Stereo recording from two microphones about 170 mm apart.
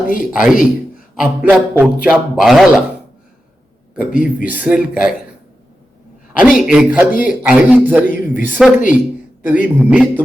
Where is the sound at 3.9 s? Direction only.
5° right (ahead or behind).